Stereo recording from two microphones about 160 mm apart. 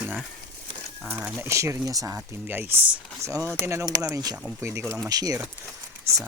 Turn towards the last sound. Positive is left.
turn(degrees=-15)  # may be behind; listen again after turning